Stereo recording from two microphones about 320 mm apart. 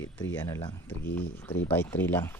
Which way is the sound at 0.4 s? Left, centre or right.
Centre.